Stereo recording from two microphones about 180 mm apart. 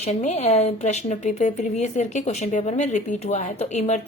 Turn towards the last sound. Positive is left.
turn(degrees=40)  # may be behind; listen again after turning